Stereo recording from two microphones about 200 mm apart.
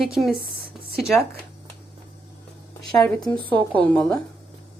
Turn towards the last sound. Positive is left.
turn(degrees=5)  # may be behind; listen again after turning